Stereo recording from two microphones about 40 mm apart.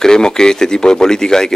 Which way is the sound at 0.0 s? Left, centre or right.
Centre.